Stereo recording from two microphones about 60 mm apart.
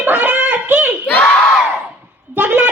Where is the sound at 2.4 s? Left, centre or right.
Right.